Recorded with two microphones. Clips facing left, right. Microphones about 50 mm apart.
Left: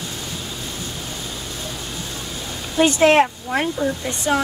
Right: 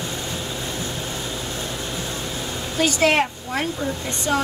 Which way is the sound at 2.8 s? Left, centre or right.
Centre.